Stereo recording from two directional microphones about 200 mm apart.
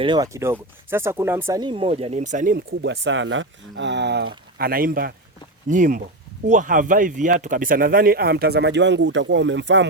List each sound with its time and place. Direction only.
0.0 s speech: 20° right (ahead or behind); by 9.8 s 65° right (ahead or behind)